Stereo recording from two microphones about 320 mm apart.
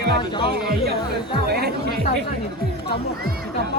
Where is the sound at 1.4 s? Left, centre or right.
Right.